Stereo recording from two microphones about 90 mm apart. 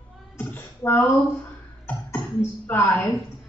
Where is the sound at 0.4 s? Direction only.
20° left (ahead or behind).